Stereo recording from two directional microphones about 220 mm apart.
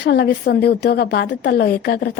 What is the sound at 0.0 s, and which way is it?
A woman's voice, 50° left (ahead or behind).